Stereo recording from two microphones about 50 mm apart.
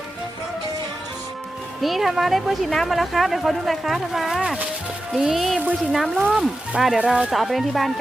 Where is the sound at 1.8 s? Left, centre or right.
Centre.